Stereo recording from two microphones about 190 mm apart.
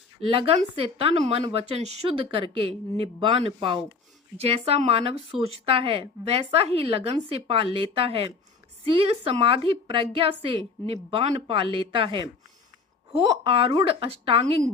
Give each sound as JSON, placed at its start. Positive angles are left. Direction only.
{"t": 0.2, "sound": "a woman's voice", "side_deg": -30}